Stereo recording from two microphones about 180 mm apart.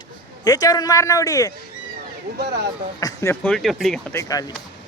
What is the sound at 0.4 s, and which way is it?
A man's voice, 20° left (ahead or behind).